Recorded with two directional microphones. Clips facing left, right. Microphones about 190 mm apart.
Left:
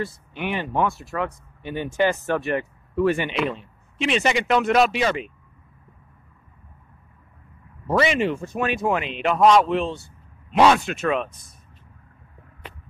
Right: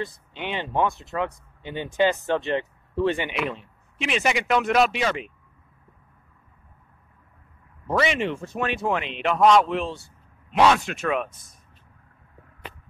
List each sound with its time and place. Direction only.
0.0 s speech: 20° right (ahead or behind)
4.0 s speech: 5° right (ahead or behind)
7.9 s speech: 5° left (ahead or behind)